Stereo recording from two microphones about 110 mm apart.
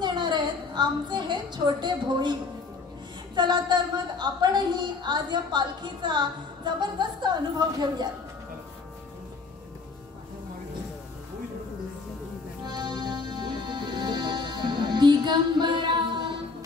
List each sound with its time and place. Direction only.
0.0 s a sound: 40° right (ahead or behind)
3.3 s a woman's voice: 40° right (ahead or behind)
12.6 s music: 40° right (ahead or behind)